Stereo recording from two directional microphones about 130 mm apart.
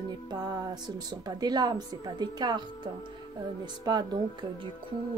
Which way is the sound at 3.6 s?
35° right (ahead or behind).